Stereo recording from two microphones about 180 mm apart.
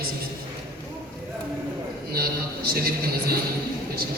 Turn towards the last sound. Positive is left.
turn(degrees=-60)  # may be behind; listen again after turning